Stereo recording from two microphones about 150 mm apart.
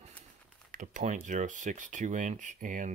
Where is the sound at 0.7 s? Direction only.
60° right (ahead or behind).